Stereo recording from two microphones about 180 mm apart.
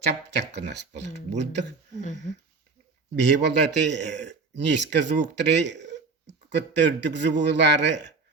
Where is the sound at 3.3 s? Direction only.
70° right (ahead or behind).